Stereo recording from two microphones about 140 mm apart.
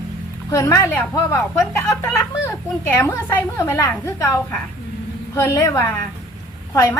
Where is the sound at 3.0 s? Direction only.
20° left (ahead or behind).